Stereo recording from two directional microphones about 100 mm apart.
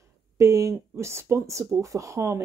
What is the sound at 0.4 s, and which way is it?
A woman's voice, 30° right (ahead or behind).